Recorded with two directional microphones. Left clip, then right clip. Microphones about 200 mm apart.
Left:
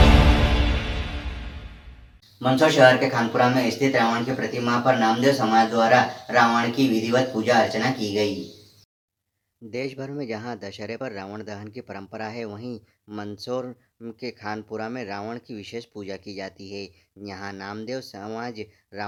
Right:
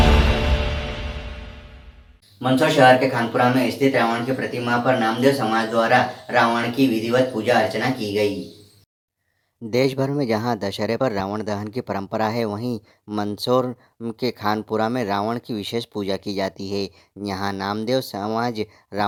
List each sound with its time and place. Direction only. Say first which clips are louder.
2.4 s speech: right 1 dB; centre (ahead or behind)
9.6 s speech: right 10 dB; 35° right (ahead or behind)